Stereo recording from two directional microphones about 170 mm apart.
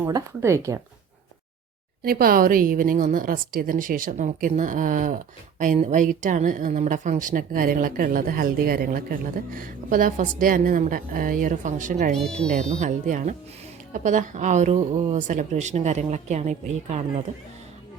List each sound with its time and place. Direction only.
0.0 s speech: 15° right (ahead or behind)
2.0 s a woman's voice: 60° right (ahead or behind)
12.1 s speech: 5° left (ahead or behind)
12.8 s a woman's voice: 45° right (ahead or behind)